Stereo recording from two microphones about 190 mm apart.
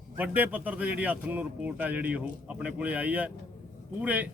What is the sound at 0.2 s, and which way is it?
Speech, 10° right (ahead or behind).